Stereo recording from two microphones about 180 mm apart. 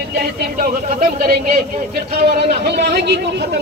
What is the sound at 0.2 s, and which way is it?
Speech, 55° right (ahead or behind).